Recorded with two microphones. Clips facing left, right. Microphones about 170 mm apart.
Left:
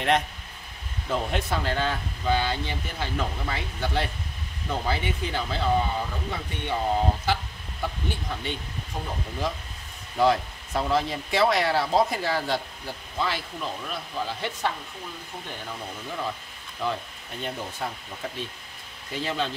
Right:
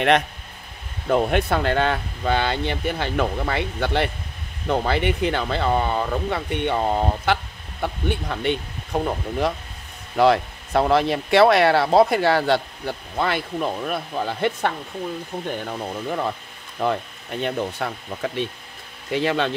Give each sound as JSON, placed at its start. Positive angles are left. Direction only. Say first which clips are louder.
{"t": 1.0, "sound": "speech", "louder": "right 8 dB", "side_deg": -60}